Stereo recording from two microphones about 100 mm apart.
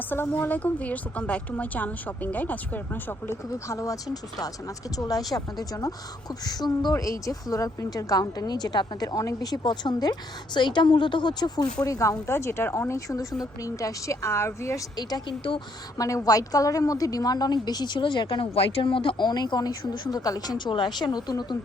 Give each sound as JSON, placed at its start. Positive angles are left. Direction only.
{"t": 0.1, "sound": "a woman's voice", "side_deg": 20}
{"t": 3.7, "sound": "a woman's voice", "side_deg": 35}
{"t": 14.9, "sound": "a woman's voice", "side_deg": 45}